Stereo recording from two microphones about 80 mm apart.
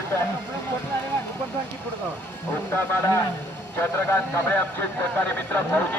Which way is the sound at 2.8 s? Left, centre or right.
Left.